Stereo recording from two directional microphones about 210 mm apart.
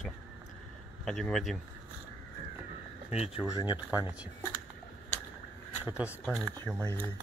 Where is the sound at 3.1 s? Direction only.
30° left (ahead or behind).